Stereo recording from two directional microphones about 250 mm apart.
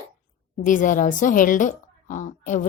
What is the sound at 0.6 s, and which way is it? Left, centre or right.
A woman's voice, left.